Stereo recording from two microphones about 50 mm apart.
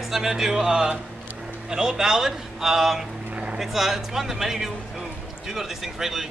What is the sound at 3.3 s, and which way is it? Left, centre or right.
Vehicle, right.